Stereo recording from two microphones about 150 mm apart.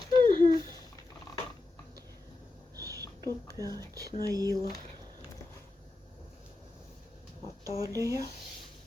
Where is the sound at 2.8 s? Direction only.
20° right (ahead or behind).